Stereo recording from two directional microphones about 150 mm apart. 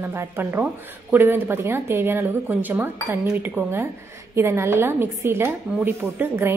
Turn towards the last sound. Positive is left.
turn(degrees=-15)  # may be behind; listen again after turning